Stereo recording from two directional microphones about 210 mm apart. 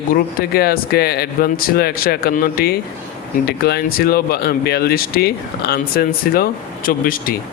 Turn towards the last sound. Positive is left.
turn(degrees=45)  # may be behind; listen again after turning